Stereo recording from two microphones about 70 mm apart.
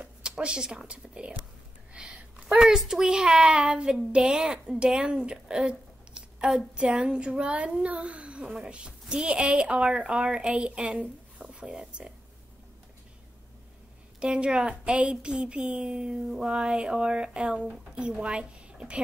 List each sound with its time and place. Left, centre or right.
0.0 s a woman's voice: centre
14.2 s a woman's voice: centre